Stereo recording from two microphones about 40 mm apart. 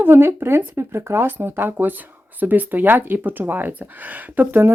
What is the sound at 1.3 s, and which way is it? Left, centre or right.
Speech, right.